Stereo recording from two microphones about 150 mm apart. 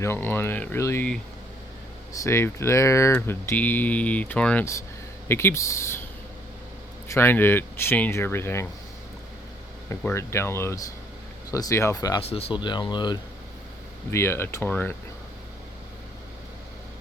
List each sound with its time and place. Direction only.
0.0 s speech: 15° left (ahead or behind)
2.2 s speech: 15° left (ahead or behind)
7.1 s speech: 15° left (ahead or behind)
10.2 s speech: 20° left (ahead or behind)
12.3 s speech: 40° left (ahead or behind)
14.1 s speech: 15° left (ahead or behind)